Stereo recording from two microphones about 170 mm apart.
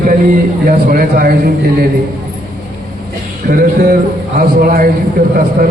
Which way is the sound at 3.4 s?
60° right (ahead or behind).